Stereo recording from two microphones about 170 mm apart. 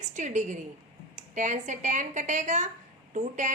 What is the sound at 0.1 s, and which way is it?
A woman's voice, 45° right (ahead or behind).